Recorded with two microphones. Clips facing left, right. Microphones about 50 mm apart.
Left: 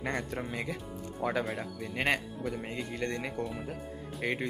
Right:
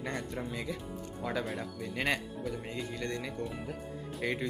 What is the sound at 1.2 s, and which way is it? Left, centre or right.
Speech, left.